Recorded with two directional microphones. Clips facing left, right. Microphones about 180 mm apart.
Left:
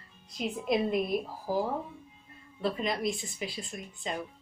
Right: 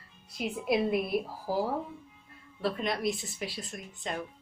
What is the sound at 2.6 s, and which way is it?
A woman's voice, centre (ahead or behind).